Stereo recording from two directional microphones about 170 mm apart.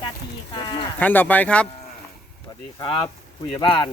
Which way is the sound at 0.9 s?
10° left (ahead or behind).